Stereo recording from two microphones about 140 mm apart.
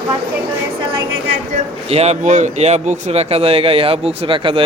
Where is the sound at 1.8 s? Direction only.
50° right (ahead or behind).